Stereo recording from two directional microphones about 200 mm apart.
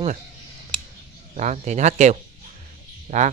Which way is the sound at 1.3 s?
35° right (ahead or behind).